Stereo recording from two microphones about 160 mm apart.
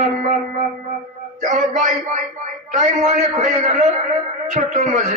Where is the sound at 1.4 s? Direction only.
50° right (ahead or behind).